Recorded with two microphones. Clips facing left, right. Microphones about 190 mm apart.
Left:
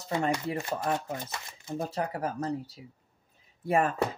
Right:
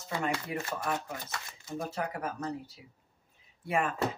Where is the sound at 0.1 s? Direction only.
20° left (ahead or behind).